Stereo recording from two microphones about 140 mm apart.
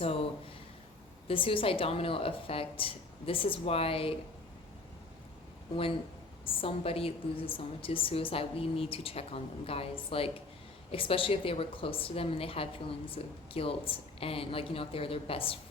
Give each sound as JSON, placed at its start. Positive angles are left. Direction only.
{"t": 0.0, "sound": "a woman's voice", "side_deg": 45}
{"t": 1.3, "sound": "a woman's voice", "side_deg": 40}
{"t": 6.4, "sound": "a woman's voice", "side_deg": 40}